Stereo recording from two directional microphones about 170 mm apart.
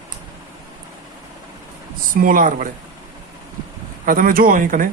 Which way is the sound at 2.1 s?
55° right (ahead or behind).